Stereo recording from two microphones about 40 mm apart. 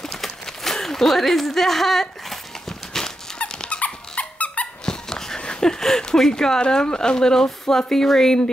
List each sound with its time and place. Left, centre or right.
0.0 s a sound: centre
3.5 s dog: left
4.1 s squeak: left
4.8 s speech: centre